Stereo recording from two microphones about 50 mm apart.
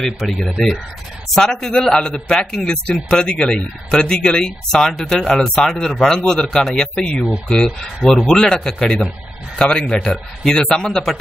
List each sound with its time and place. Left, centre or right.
0.0 s speech: centre
2.3 s speech: centre
2.7 s speech: left